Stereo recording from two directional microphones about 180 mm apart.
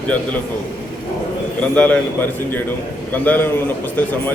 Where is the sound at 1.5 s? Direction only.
10° left (ahead or behind).